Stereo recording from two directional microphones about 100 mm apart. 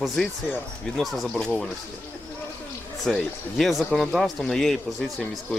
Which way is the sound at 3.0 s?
5° left (ahead or behind).